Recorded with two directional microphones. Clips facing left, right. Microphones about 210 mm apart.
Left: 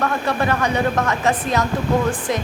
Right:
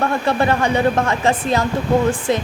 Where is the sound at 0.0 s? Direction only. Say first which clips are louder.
Right 3 dB; 30° right (ahead or behind).